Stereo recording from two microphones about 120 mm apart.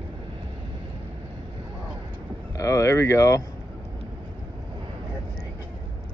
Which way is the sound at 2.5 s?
25° left (ahead or behind).